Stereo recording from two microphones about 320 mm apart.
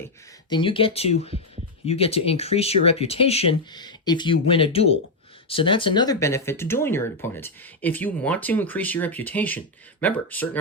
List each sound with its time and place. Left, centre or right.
0.5 s speech: centre